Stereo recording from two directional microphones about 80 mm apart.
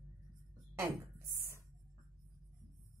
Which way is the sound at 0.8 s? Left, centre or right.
Right.